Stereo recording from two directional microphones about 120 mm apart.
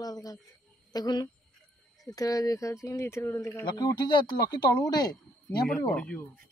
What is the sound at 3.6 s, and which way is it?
Speech, 35° left (ahead or behind).